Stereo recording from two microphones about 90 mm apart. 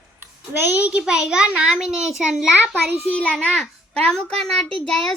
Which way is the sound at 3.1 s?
15° left (ahead or behind).